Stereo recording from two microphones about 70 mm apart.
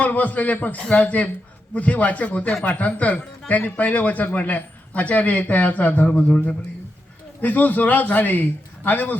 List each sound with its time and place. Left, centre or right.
0.0 s speech: left